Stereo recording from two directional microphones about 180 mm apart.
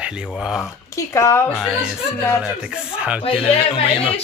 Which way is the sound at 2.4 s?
5° right (ahead or behind).